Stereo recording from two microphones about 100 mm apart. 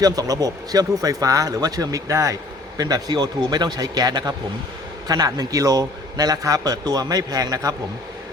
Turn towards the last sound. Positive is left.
turn(degrees=-40)  # may be behind; listen again after turning